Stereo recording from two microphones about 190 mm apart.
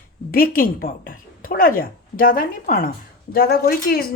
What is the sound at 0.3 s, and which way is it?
A woman's voice, 50° left (ahead or behind).